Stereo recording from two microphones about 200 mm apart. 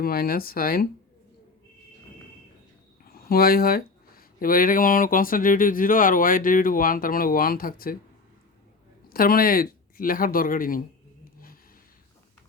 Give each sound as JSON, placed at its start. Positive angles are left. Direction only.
{"t": 0.0, "sound": "speech", "side_deg": 50}
{"t": 3.2, "sound": "speech", "side_deg": 50}
{"t": 9.0, "sound": "speech", "side_deg": 45}